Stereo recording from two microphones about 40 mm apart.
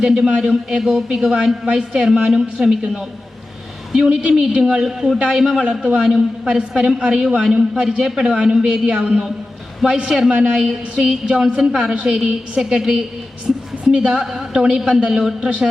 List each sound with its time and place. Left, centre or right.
0.0 s a man's voice: centre
5.6 s a man's voice: centre
11.7 s a man's voice: centre